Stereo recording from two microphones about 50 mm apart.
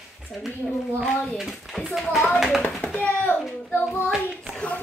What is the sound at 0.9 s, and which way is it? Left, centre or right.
Speech, left.